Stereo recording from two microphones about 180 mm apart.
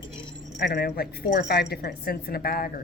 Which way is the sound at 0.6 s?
65° left (ahead or behind).